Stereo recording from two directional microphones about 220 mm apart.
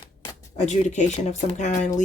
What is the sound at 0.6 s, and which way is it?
Speech, 30° left (ahead or behind).